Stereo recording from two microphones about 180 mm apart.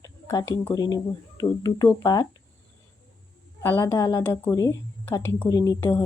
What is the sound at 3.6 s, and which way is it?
A woman's voice, 15° left (ahead or behind).